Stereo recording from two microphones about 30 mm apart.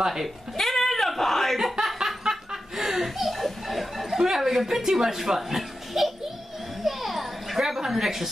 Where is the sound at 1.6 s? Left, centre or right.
Centre.